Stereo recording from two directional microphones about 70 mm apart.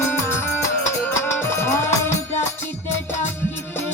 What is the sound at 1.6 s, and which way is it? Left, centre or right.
Music, left.